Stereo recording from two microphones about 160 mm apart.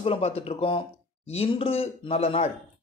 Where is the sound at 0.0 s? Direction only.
40° left (ahead or behind).